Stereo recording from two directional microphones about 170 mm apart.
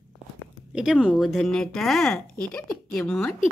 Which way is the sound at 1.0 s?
Centre (ahead or behind).